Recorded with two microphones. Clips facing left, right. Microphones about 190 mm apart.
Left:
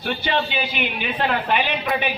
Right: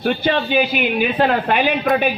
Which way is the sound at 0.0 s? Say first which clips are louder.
Right 5 dB; 45° right (ahead or behind).